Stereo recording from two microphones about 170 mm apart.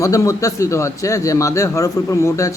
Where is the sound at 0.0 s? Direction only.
20° left (ahead or behind).